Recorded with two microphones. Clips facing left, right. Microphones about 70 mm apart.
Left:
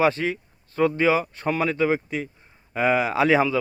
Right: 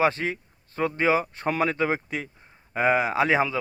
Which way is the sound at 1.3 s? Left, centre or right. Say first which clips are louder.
Left 1 dB; right.